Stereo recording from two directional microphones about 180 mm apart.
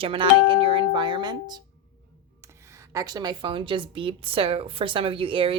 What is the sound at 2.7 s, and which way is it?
A woman's voice, 20° right (ahead or behind).